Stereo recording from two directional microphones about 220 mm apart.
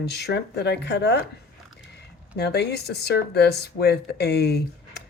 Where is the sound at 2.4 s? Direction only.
50° left (ahead or behind).